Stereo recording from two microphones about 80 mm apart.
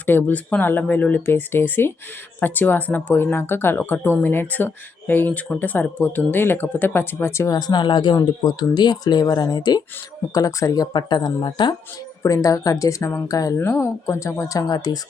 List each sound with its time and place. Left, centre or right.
0.0 s speech: left
7.5 s speech: left
12.2 s speech: left
13.2 s speech: left
13.6 s speech: left